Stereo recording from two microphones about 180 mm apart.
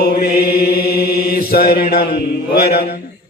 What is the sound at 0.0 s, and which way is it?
Mantra, 60° left (ahead or behind).